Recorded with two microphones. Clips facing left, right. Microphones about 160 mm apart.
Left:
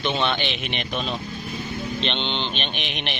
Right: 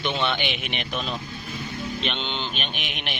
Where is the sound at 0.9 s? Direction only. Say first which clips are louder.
Left 2 dB; 25° left (ahead or behind).